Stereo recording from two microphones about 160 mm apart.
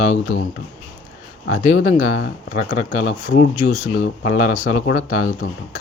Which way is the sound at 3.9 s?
50° left (ahead or behind).